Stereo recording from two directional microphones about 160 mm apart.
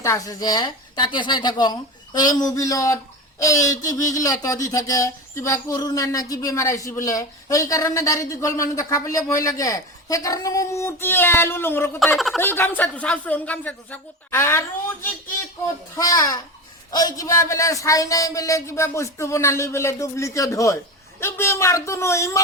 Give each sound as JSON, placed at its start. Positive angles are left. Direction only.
{"t": 0.0, "sound": "speech", "side_deg": 20}
{"t": 12.1, "sound": "speech", "side_deg": 0}
{"t": 12.4, "sound": "a woman's voice", "side_deg": 15}
{"t": 16.0, "sound": "a woman's voice", "side_deg": 20}